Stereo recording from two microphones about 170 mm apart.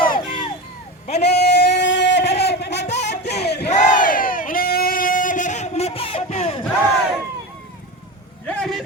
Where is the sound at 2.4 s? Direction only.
75° left (ahead or behind).